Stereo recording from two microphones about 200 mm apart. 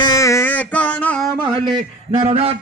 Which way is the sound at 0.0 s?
15° left (ahead or behind).